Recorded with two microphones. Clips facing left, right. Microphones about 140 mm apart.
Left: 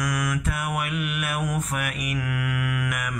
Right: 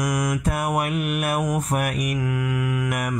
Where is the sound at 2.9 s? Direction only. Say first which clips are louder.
Right 5 dB; 40° right (ahead or behind).